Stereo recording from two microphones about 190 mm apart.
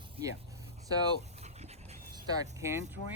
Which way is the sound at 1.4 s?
35° right (ahead or behind).